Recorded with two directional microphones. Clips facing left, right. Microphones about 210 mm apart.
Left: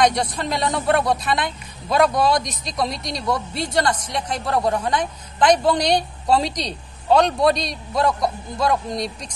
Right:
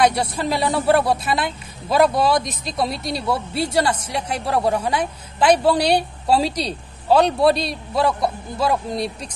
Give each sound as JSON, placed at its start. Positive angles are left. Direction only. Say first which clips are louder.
{"t": 0.0, "sound": "a man's voice", "louder": "right 1 dB", "side_deg": -5}